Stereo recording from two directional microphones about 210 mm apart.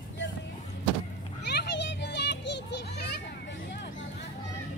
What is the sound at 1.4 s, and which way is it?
Children playing, 55° left (ahead or behind).